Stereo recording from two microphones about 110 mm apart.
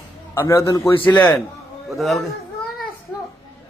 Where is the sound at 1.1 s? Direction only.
10° left (ahead or behind).